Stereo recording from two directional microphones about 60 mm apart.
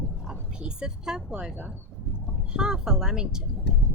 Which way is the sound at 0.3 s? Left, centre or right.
Centre.